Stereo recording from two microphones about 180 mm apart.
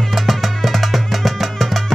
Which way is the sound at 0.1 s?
Centre (ahead or behind).